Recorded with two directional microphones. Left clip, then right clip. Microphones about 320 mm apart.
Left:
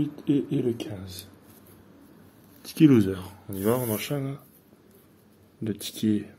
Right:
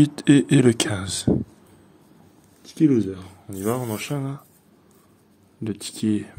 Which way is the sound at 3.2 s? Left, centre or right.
Centre.